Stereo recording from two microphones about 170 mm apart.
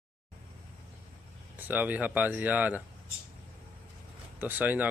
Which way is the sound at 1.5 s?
10° right (ahead or behind).